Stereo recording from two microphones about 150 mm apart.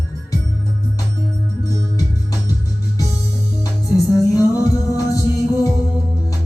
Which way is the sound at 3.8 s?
20° left (ahead or behind).